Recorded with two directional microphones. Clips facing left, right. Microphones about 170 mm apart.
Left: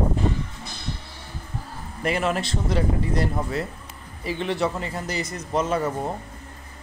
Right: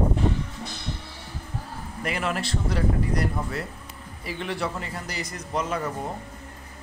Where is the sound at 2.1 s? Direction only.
25° left (ahead or behind).